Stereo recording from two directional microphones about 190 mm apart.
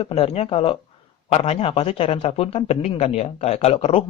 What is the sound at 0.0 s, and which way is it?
Speech, 35° left (ahead or behind).